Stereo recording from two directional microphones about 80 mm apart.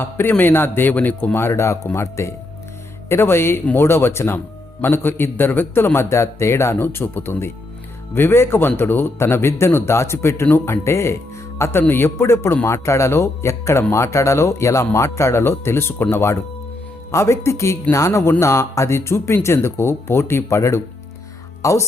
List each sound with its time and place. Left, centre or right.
0.0 s a man's voice: left